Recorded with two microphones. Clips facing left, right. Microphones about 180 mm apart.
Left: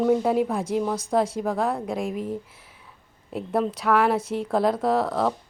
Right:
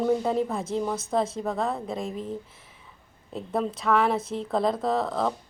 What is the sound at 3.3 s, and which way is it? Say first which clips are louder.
A woman's voice: left 3 dB; 5° left (ahead or behind).